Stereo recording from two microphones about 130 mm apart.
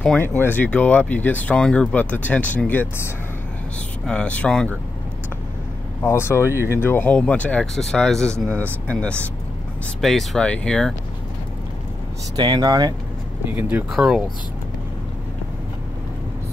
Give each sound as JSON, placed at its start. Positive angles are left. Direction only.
{"t": 0.0, "sound": "speech", "side_deg": 5}
{"t": 4.0, "sound": "speech", "side_deg": 10}
{"t": 6.0, "sound": "speech", "side_deg": 20}
{"t": 6.5, "sound": "speech", "side_deg": -20}
{"t": 6.8, "sound": "speech", "side_deg": 15}
{"t": 12.4, "sound": "speech", "side_deg": -30}
{"t": 13.5, "sound": "speech", "side_deg": -15}
{"t": 13.9, "sound": "speech", "side_deg": -5}